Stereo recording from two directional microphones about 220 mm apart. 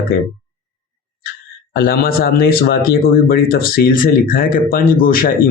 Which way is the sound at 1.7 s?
40° left (ahead or behind).